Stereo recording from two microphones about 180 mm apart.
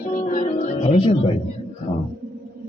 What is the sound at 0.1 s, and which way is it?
Music, 45° left (ahead or behind).